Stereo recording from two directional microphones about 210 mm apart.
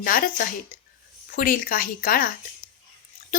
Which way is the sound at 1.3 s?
40° left (ahead or behind).